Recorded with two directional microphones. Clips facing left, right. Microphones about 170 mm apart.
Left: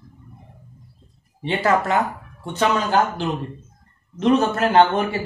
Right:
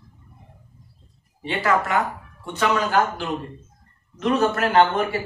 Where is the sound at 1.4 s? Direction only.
25° left (ahead or behind).